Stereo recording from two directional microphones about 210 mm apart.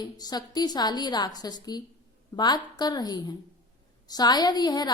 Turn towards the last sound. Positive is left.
turn(degrees=20)  # may be behind; listen again after turning